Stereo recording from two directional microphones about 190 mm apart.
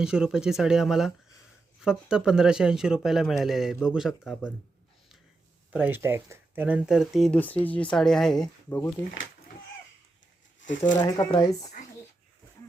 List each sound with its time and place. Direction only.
0.0 s speech: 5° right (ahead or behind)
5.7 s speech: 10° right (ahead or behind)
10.6 s speech: 75° left (ahead or behind)
11.3 s speech: 20° left (ahead or behind)